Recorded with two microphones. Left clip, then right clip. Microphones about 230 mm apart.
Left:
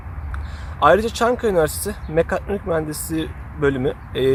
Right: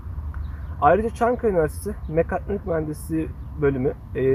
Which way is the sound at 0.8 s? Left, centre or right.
Centre.